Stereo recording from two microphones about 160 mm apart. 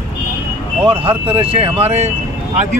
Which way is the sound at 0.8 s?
35° right (ahead or behind).